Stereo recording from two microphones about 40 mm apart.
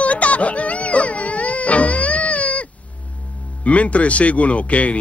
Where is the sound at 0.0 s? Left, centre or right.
Left.